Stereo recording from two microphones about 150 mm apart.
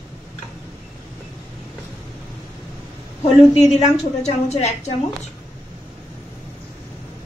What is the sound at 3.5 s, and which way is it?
A woman's voice, 50° left (ahead or behind).